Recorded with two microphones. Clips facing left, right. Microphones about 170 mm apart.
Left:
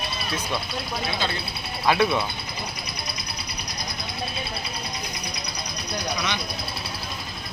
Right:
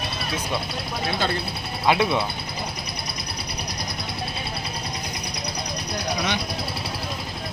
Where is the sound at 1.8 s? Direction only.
20° right (ahead or behind).